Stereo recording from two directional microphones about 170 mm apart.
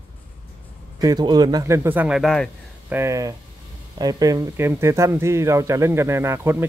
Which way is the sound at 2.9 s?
15° right (ahead or behind).